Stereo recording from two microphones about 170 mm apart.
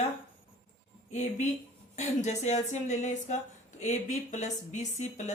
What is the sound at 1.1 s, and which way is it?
A woman's voice, 45° left (ahead or behind).